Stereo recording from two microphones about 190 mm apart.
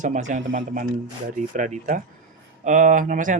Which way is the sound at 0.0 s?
40° right (ahead or behind).